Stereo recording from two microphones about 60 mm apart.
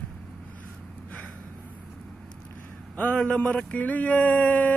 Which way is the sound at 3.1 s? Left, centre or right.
Centre.